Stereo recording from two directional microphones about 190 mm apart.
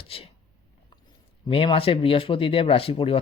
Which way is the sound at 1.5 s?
30° left (ahead or behind).